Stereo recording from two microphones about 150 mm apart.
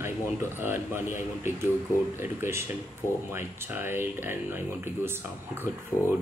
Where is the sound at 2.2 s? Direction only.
15° right (ahead or behind).